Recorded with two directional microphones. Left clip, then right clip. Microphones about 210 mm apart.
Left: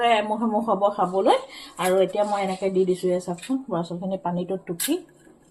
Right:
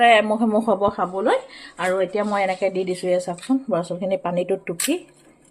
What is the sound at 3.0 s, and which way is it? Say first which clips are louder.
Speech: right 4 dB; 45° right (ahead or behind).